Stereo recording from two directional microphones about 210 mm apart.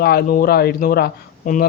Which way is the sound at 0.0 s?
45° left (ahead or behind).